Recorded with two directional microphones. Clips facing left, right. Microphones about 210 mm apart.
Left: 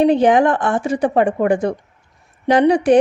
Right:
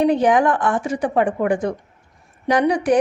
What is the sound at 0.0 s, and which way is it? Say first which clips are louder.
Speech: left 3 dB; 25° left (ahead or behind).